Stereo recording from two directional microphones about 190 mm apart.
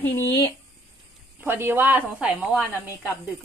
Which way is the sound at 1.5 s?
10° right (ahead or behind).